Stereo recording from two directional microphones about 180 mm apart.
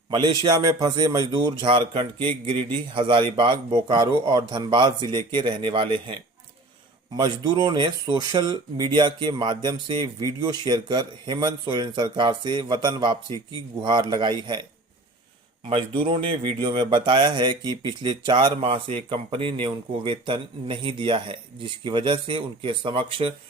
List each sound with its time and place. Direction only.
0.1 s speech: 25° right (ahead or behind)
7.2 s speech: 25° right (ahead or behind)
15.7 s speech: 30° right (ahead or behind)